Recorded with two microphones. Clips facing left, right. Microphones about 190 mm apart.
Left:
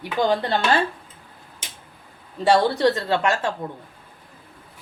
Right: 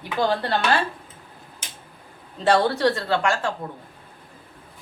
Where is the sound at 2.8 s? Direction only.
20° left (ahead or behind).